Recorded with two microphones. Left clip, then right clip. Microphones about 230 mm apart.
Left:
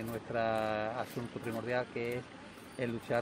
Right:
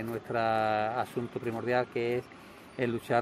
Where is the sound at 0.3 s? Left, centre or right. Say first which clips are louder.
Right 5 dB; right.